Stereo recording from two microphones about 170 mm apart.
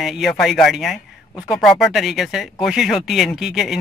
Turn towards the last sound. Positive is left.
turn(degrees=0)  # may be behind; listen again after turning